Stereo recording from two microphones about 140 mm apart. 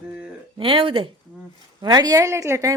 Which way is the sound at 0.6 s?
40° right (ahead or behind).